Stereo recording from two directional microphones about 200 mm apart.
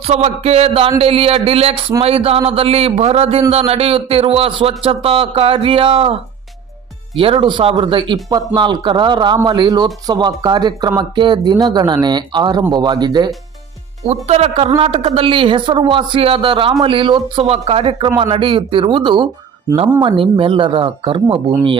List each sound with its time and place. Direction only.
0.0 s speech: 30° right (ahead or behind)
7.2 s speech: 25° right (ahead or behind)
14.3 s speech: 30° right (ahead or behind)